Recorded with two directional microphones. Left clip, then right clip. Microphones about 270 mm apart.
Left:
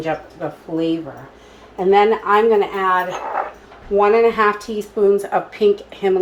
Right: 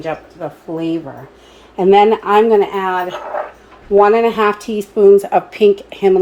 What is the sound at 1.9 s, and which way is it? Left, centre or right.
Speech, right.